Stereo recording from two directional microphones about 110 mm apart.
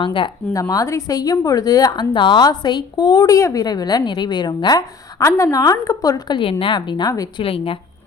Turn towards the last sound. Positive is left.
turn(degrees=55)  # may be behind; listen again after turning